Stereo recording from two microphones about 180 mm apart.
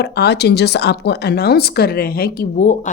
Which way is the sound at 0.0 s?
65° left (ahead or behind).